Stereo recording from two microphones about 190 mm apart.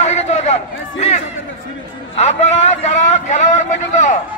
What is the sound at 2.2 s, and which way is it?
A man's voice, 35° left (ahead or behind).